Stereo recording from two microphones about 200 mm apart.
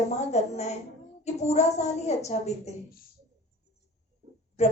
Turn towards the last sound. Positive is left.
turn(degrees=30)  # may be behind; listen again after turning